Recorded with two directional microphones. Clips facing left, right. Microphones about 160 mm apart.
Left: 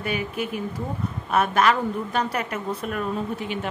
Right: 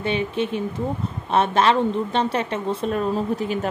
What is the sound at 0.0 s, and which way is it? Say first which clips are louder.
A woman's voice: right 4 dB; 25° right (ahead or behind).